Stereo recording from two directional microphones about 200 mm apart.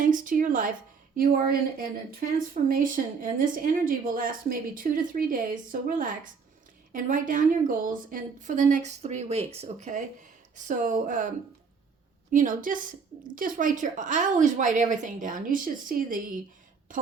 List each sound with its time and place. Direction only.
0.0 s a woman's voice: 40° right (ahead or behind)
6.9 s speech: 40° right (ahead or behind)
12.3 s speech: 40° right (ahead or behind)